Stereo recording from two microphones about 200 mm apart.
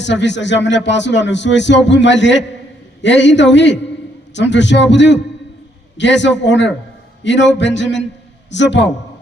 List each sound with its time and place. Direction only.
0.0 s a man's voice: 60° left (ahead or behind)